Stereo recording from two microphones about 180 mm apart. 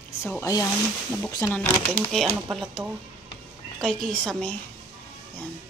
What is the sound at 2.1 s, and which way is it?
Speech, centre (ahead or behind).